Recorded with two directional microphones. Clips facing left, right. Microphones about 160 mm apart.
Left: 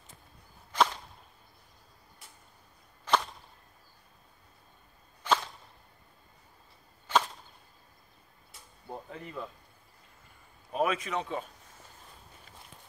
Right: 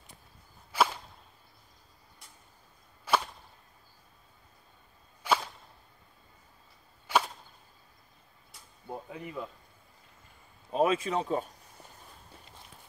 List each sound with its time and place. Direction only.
0.7 s whip: 10° right (ahead or behind)
3.1 s whip: 10° right (ahead or behind)
5.2 s whip: 10° right (ahead or behind)
7.1 s whip: 10° right (ahead or behind)
8.8 s speech: 15° right (ahead or behind)
10.7 s a man's voice: 30° right (ahead or behind)